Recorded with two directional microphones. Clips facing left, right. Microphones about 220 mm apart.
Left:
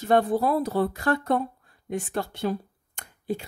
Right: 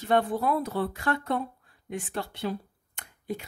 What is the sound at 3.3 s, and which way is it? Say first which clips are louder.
Speech: left 4 dB; 30° left (ahead or behind).